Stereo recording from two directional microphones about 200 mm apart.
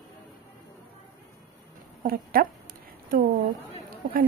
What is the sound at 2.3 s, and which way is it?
Speech, 45° right (ahead or behind).